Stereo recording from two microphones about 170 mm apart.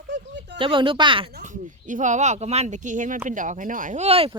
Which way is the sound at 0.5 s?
30° right (ahead or behind).